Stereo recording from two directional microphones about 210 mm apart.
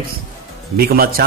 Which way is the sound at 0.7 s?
45° right (ahead or behind).